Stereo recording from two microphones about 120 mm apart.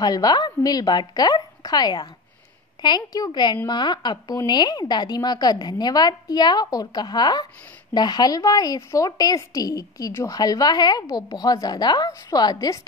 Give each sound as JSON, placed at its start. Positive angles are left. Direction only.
{"t": 0.0, "sound": "a woman's voice", "side_deg": 35}